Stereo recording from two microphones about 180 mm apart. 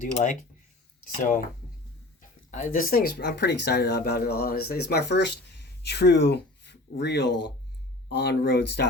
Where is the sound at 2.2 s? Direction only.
45° left (ahead or behind); by 8.9 s 70° left (ahead or behind).